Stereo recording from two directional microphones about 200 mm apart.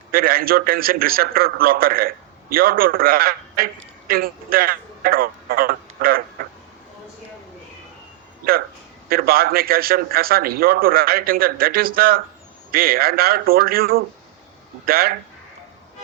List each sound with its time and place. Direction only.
0.1 s a man's voice: 50° right (ahead or behind)
9.0 s a man's voice: 50° right (ahead or behind)